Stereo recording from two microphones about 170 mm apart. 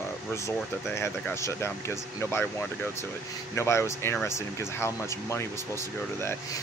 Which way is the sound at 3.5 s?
15° left (ahead or behind).